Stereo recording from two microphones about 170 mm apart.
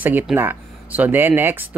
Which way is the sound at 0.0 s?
10° right (ahead or behind).